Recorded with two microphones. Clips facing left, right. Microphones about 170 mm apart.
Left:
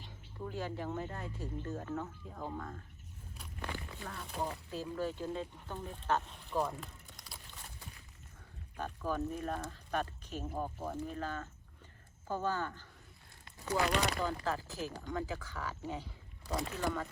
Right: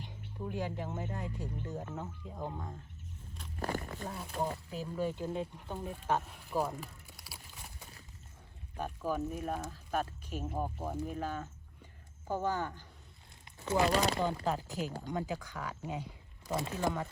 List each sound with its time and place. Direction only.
0.3 s speech: 15° right (ahead or behind)
3.6 s a sound: 40° right (ahead or behind)
4.3 s speech: centre (ahead or behind)
4.7 s speech: 15° right (ahead or behind)
8.8 s speech: 10° right (ahead or behind)
13.4 s a sound: 20° right (ahead or behind)
13.8 s speech: 35° right (ahead or behind)
14.2 s speech: 20° right (ahead or behind)